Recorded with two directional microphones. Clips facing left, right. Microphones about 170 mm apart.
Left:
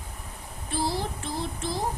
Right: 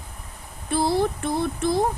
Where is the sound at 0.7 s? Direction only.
60° right (ahead or behind).